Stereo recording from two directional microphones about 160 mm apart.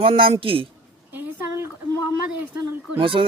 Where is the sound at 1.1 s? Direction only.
15° right (ahead or behind).